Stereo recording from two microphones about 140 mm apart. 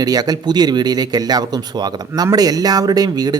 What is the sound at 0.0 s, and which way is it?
Speech, 25° right (ahead or behind).